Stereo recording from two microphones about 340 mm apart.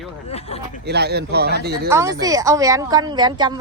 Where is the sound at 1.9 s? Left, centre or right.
Centre.